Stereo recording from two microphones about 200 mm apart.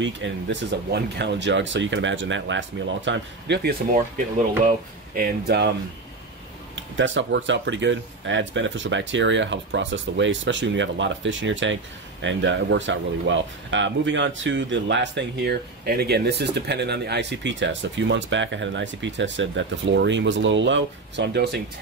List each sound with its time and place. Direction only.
0.0 s speech: 65° right (ahead or behind)
5.1 s speech: 50° right (ahead or behind)
6.7 s speech: 65° right (ahead or behind)